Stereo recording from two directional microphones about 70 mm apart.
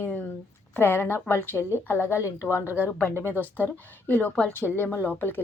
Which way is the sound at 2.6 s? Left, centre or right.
Right.